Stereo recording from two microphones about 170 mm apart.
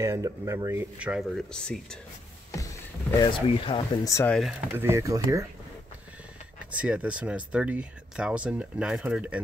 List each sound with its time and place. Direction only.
0.0 s speech: 15° right (ahead or behind)
1.5 s speech: 5° left (ahead or behind)
3.2 s speech: 30° left (ahead or behind)
4.1 s speech: 15° left (ahead or behind)
4.4 s speech: 10° right (ahead or behind)
6.8 s speech: 5° right (ahead or behind)